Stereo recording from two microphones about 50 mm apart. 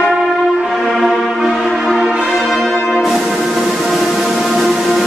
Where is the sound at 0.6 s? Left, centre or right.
Centre.